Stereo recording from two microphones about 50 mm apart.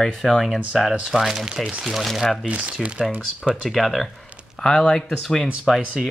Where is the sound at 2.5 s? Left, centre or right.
Right.